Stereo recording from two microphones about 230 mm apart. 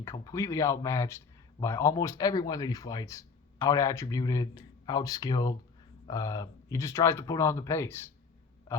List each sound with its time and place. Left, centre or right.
0.0 s speech: centre